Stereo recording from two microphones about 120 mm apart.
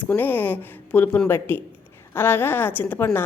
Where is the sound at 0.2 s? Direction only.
15° left (ahead or behind).